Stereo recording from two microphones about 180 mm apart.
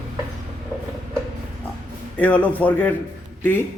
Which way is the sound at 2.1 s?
10° left (ahead or behind).